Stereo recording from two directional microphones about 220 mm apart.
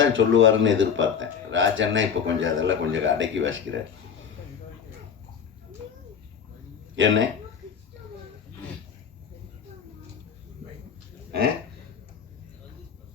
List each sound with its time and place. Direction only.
0.0 s speech: 60° right (ahead or behind)
6.9 s speech: 60° right (ahead or behind)